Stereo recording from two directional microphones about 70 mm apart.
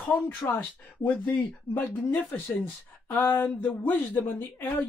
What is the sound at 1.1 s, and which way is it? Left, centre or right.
Speech, left.